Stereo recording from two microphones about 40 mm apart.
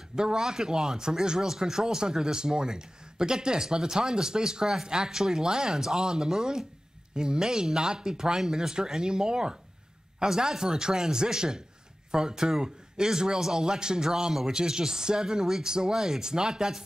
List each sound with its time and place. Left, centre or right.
0.1 s speech: centre